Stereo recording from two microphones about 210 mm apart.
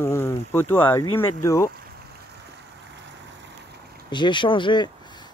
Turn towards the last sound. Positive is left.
turn(degrees=20)  # may be behind; listen again after turning